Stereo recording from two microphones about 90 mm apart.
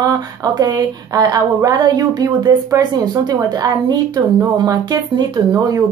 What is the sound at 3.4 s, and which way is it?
Speech, 40° right (ahead or behind).